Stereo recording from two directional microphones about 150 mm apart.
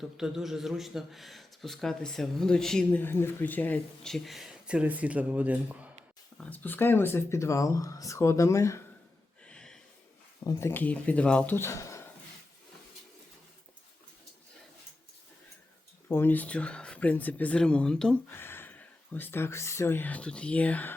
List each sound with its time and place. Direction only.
0.2 s speech: 5° right (ahead or behind)
3.0 s speech: 15° left (ahead or behind); by 5.9 s 10° right (ahead or behind)
6.4 s speech: 10° left (ahead or behind)
9.4 s a sound: 5° left (ahead or behind)
10.4 s speech: 20° left (ahead or behind)
16.0 s speech: 15° left (ahead or behind)